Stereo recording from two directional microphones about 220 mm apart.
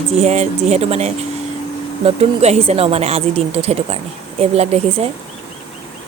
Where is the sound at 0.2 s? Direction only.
30° right (ahead or behind).